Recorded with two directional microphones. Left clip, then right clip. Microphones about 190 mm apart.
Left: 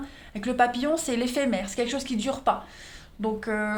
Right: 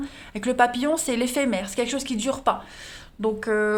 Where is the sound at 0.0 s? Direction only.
35° right (ahead or behind).